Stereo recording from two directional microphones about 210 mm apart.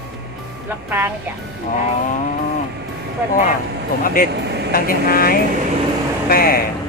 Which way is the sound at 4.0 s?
40° left (ahead or behind).